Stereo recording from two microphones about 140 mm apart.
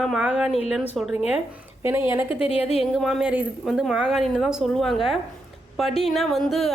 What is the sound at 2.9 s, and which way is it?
Speech, centre (ahead or behind).